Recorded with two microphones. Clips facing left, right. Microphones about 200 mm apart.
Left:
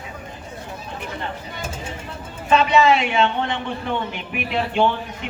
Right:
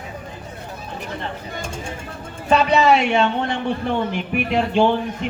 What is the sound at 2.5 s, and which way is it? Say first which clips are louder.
A woman's voice: right 1 dB; 40° right (ahead or behind).